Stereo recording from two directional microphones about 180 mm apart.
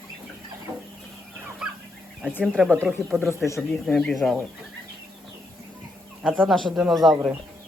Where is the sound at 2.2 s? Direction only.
5° right (ahead or behind).